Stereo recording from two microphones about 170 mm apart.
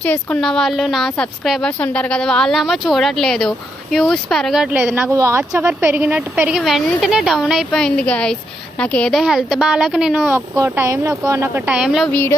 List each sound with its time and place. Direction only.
0.0 s a woman's voice: 10° left (ahead or behind)
5.1 s a woman's voice: 15° right (ahead or behind)
10.3 s speech: 15° right (ahead or behind)